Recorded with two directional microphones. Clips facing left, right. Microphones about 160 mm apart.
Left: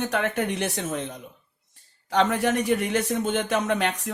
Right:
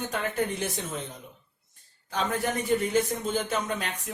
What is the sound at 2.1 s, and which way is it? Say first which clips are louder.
Speech: left 6 dB; 80° left.